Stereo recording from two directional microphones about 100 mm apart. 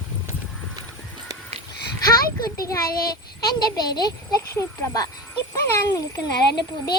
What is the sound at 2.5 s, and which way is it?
A child's voice, 40° left (ahead or behind).